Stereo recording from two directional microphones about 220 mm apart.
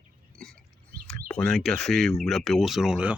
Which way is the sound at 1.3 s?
5° left (ahead or behind).